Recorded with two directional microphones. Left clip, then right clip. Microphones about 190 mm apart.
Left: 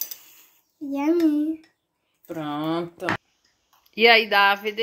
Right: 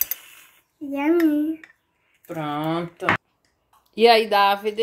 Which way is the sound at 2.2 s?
5° left (ahead or behind).